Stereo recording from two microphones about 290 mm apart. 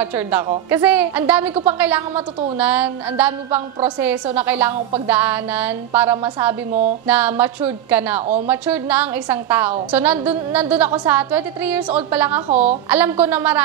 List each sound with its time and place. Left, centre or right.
0.0 s a woman's voice: centre
6.7 s music: right
7.1 s a woman's voice: centre